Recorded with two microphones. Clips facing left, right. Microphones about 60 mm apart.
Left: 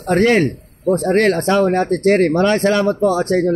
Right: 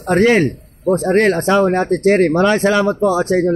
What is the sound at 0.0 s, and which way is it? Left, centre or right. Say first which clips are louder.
Speech: right 1 dB; right.